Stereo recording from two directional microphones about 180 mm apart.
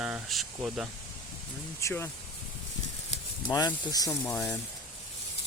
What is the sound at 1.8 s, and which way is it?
Speech, 15° left (ahead or behind).